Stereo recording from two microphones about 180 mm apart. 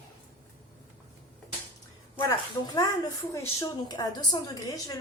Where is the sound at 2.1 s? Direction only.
20° left (ahead or behind).